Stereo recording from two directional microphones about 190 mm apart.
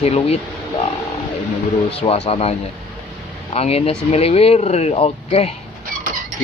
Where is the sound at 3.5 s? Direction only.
30° left (ahead or behind).